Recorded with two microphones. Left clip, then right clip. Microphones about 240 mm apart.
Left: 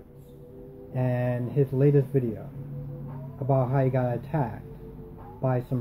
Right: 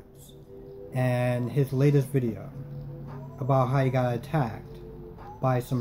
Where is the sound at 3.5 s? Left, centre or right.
Right.